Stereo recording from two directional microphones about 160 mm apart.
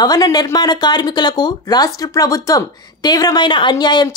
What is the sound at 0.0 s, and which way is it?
Speech, 25° left (ahead or behind).